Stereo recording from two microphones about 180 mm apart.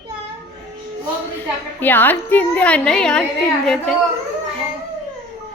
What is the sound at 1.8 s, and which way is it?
A woman's voice, 10° left (ahead or behind).